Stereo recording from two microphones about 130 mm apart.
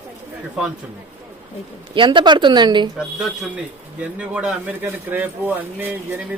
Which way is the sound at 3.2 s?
5° right (ahead or behind).